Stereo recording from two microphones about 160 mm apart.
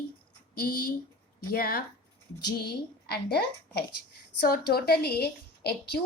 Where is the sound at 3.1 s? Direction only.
80° left.